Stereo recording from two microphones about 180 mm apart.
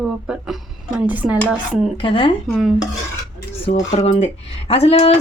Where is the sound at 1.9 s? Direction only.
30° left (ahead or behind).